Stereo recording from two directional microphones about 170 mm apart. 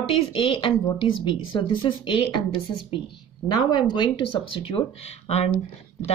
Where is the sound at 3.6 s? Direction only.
25° left (ahead or behind).